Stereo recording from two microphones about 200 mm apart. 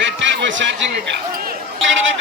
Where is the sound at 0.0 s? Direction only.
65° right (ahead or behind).